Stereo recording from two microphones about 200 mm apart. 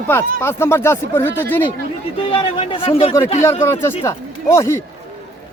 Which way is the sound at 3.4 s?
15° left (ahead or behind).